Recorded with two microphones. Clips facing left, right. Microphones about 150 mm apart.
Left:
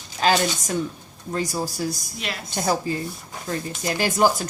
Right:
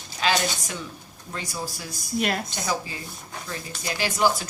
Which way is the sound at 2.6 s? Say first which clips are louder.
Left 6 dB; 45° left (ahead or behind).